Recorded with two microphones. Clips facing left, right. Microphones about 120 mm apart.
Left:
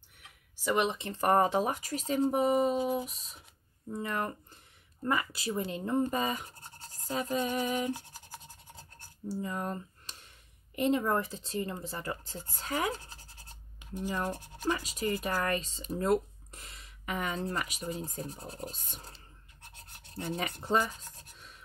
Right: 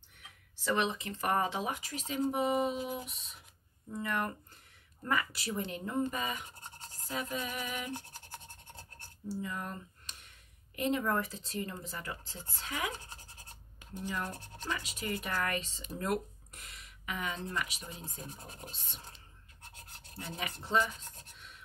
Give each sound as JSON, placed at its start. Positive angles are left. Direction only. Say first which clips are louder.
{"t": 0.6, "sound": "speech", "louder": "left 3 dB", "side_deg": 15}
{"t": 0.9, "sound": "speech", "louder": "left 2 dB", "side_deg": 30}
{"t": 1.2, "sound": "speech", "louder": "left 6 dB", "side_deg": 40}
{"t": 2.8, "sound": "speech", "louder": "left 7 dB", "side_deg": 30}
{"t": 3.9, "sound": "speech", "louder": "left 1 dB", "side_deg": 25}
{"t": 6.9, "sound": "a sound", "louder": "left 5 dB", "side_deg": 35}
{"t": 7.9, "sound": "scratch", "louder": "left 4 dB", "side_deg": 10}
{"t": 9.3, "sound": "speech", "louder": "left 4 dB", "side_deg": 35}
{"t": 11.9, "sound": "speech", "louder": "left 5 dB", "side_deg": 40}
{"t": 14.3, "sound": "speech", "louder": "left 5 dB", "side_deg": 10}
{"t": 14.7, "sound": "speech", "louder": "left 6 dB", "side_deg": 40}
{"t": 20.6, "sound": "scratch", "louder": "left 1 dB", "side_deg": 40}